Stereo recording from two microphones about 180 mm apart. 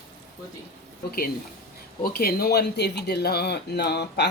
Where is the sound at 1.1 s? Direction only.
55° left (ahead or behind).